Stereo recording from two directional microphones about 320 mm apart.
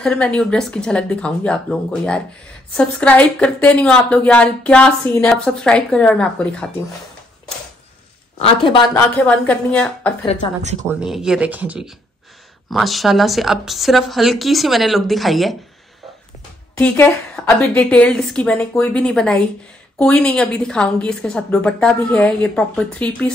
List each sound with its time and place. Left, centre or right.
0.0 s a woman's voice: centre
8.4 s speech: centre
9.1 s a woman's voice: centre
10.2 s speech: centre
10.9 s a woman's voice: centre
16.7 s a woman's voice: centre